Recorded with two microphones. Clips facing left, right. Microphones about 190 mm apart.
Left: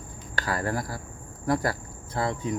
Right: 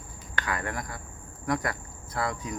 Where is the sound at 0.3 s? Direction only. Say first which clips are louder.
Left 4 dB; 35° left (ahead or behind).